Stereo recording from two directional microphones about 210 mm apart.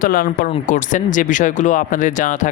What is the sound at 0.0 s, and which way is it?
A man's voice, 45° left (ahead or behind).